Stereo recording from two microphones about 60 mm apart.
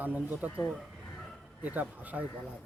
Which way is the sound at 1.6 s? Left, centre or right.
Right.